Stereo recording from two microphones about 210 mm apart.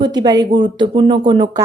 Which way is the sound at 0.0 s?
20° right (ahead or behind).